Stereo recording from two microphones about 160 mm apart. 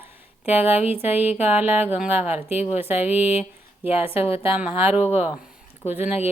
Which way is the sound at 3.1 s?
40° left (ahead or behind).